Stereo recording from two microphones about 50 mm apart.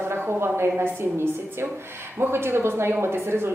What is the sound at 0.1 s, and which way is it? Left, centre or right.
Speech, right.